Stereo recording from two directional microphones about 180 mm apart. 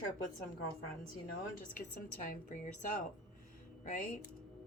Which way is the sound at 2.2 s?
50° left (ahead or behind).